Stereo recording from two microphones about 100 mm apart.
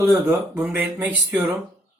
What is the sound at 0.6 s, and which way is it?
Speech, 15° right (ahead or behind).